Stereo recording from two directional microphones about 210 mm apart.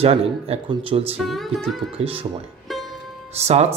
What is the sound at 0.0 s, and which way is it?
Speech, 30° right (ahead or behind).